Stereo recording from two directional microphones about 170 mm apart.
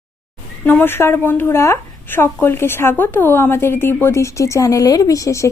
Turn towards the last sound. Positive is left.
turn(degrees=20)  # may be behind; listen again after turning